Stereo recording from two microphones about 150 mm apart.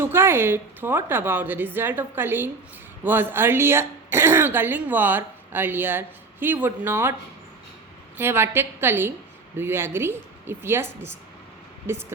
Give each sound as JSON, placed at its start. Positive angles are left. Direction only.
{"t": 0.0, "sound": "speech", "side_deg": -15}
{"t": 8.2, "sound": "speech", "side_deg": -15}